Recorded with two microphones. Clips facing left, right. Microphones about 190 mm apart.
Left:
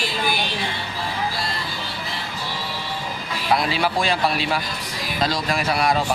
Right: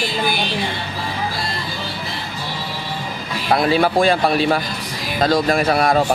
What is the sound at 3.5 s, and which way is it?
Speech, 50° right (ahead or behind).